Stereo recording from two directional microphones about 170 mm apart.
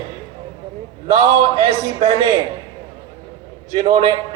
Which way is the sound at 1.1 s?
40° right (ahead or behind).